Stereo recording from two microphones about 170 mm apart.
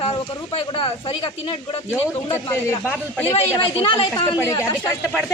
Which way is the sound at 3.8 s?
35° left (ahead or behind).